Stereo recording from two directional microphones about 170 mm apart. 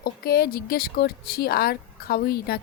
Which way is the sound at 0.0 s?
65° left (ahead or behind).